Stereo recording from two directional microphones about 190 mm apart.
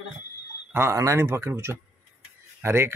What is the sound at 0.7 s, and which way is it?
A man's voice, 15° right (ahead or behind).